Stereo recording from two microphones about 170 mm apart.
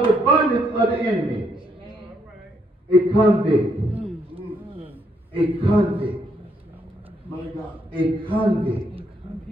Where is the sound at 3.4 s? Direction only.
35° right (ahead or behind).